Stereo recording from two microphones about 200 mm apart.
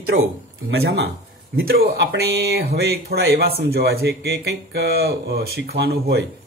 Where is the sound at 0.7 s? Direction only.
55° right (ahead or behind).